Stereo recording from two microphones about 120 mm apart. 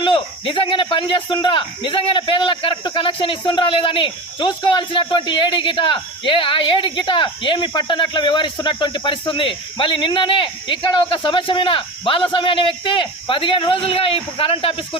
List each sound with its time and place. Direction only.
0.0 s a man's voice: 45° left (ahead or behind)